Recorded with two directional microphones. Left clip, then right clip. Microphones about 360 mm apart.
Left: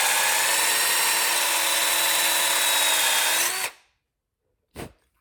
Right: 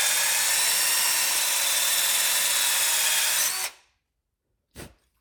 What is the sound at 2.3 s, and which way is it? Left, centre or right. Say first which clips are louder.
Power tool: left 3 dB; left.